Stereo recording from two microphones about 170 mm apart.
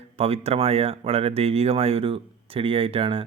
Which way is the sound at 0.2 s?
35° right (ahead or behind).